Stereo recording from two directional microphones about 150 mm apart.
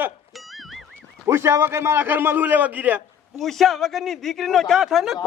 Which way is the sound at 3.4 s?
Centre (ahead or behind).